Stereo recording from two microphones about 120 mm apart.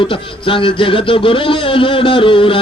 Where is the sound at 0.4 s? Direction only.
45° left (ahead or behind).